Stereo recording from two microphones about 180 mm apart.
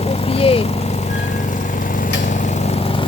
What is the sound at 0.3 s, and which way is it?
Vehicle, 30° left (ahead or behind).